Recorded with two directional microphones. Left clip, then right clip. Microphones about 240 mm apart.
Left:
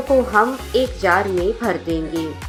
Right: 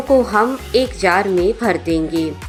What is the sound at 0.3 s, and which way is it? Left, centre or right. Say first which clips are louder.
Speech: right 1 dB; right.